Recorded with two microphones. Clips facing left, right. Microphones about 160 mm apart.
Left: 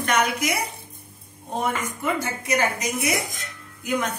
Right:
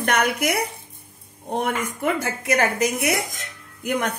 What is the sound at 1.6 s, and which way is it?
Speech, 65° right (ahead or behind).